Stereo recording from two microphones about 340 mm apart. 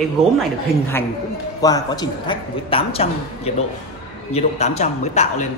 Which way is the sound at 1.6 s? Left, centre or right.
Centre.